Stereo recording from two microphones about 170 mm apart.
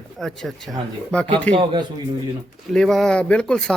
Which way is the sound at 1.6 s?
30° right (ahead or behind).